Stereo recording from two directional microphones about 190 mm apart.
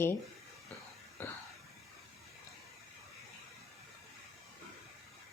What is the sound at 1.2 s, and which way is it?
Speech, 10° left (ahead or behind).